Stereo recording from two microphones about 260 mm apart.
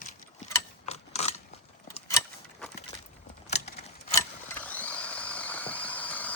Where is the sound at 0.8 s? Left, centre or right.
Left.